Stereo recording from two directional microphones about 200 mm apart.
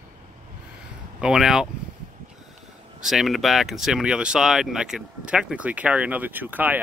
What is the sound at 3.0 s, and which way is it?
Speech, centre (ahead or behind).